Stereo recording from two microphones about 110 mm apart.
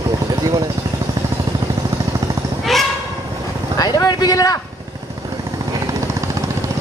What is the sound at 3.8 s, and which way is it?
Vehicle, 35° left (ahead or behind).